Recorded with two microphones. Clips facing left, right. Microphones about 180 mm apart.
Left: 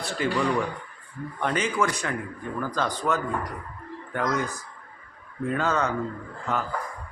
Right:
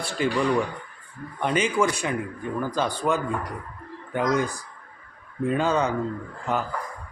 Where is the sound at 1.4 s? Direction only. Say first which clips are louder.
Right 3 dB; 15° right (ahead or behind).